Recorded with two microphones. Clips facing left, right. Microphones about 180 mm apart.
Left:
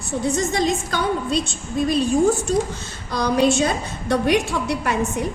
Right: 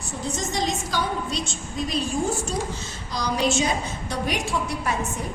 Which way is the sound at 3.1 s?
60° left (ahead or behind).